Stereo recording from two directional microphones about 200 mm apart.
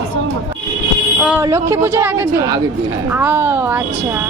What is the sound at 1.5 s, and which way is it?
A woman's voice, 15° right (ahead or behind).